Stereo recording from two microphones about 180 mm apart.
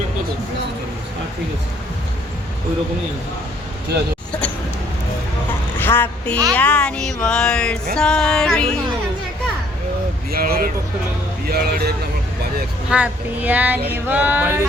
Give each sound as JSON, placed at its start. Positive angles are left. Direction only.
{"t": 4.3, "sound": "speech", "side_deg": 5}
{"t": 5.8, "sound": "a woman's voice", "side_deg": 10}
{"t": 6.5, "sound": "a sound", "side_deg": 5}
{"t": 10.3, "sound": "speech", "side_deg": -55}
{"t": 12.9, "sound": "speech", "side_deg": -10}